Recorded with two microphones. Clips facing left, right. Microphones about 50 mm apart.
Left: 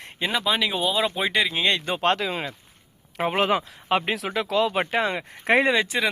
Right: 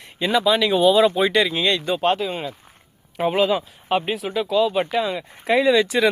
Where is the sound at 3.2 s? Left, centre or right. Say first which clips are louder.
Right 3 dB; left.